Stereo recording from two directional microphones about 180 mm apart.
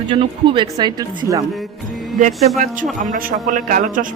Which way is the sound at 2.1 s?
45° right (ahead or behind).